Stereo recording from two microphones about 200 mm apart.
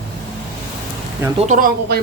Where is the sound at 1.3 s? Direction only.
35° right (ahead or behind).